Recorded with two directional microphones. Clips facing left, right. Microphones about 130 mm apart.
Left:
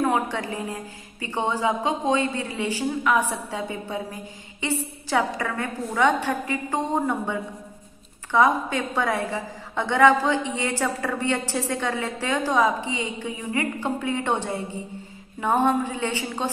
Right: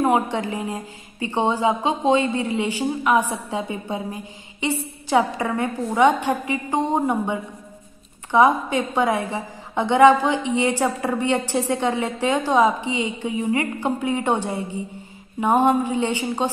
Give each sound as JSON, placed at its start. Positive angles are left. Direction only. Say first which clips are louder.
{"t": 0.0, "sound": "a woman's voice", "louder": "right 4 dB", "side_deg": -20}